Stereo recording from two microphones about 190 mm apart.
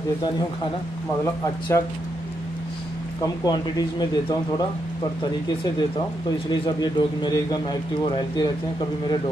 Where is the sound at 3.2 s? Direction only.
20° left (ahead or behind).